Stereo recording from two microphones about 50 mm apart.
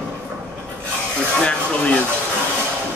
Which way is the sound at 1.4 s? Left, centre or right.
Left.